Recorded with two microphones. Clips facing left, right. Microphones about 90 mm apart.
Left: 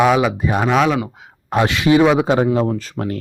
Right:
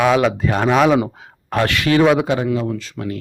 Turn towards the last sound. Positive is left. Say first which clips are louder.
# left 2 dB
turn(degrees=40)  # may be behind; listen again after turning